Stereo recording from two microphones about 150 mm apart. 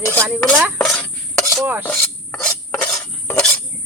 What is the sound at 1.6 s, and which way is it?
Dishes, 15° right (ahead or behind).